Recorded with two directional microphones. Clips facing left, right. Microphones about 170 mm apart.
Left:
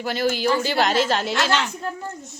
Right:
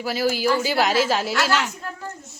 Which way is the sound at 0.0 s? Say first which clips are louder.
Even; 5° right (ahead or behind).